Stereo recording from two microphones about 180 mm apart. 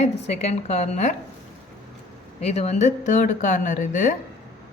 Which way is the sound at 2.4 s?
35° left (ahead or behind).